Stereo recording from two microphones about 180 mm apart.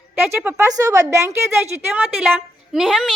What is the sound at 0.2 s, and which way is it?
A woman's voice, 10° right (ahead or behind).